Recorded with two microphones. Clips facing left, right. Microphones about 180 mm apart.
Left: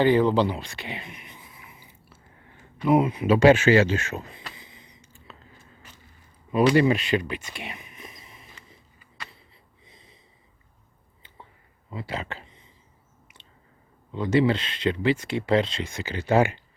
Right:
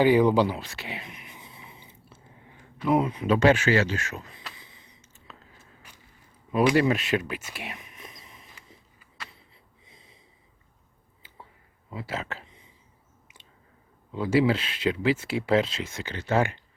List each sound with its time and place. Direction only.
0.0 s speech: 10° right (ahead or behind)
1.4 s biting: 25° right (ahead or behind)
2.7 s speech: 5° left (ahead or behind)
3.5 s speech: 20° left (ahead or behind)
5.3 s a sound: 5° right (ahead or behind)
6.7 s speech: centre (ahead or behind)
9.8 s snort: 5° right (ahead or behind)
11.9 s a sound: 5° right (ahead or behind)
14.1 s speech: 5° right (ahead or behind)
16.1 s speech: 15° left (ahead or behind)